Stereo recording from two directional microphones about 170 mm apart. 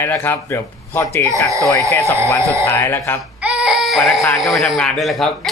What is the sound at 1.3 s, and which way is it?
Speech, 20° right (ahead or behind).